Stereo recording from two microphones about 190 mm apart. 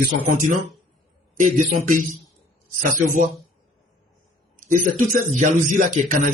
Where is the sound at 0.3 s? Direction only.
40° right (ahead or behind).